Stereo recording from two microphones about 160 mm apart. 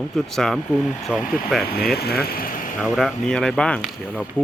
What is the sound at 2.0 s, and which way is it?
Speech, 75° left (ahead or behind).